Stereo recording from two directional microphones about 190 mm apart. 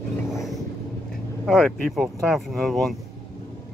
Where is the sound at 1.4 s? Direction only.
Centre (ahead or behind).